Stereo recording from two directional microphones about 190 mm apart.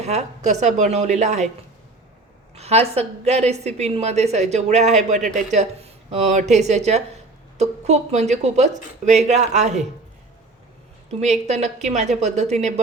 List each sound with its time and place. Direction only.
0.0 s a woman's voice: 35° right (ahead or behind)
2.6 s a woman's voice: 35° right (ahead or behind)
11.2 s a woman's voice: 35° right (ahead or behind)